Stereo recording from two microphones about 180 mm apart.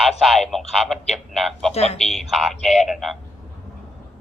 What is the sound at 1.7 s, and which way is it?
Speech, 35° left (ahead or behind).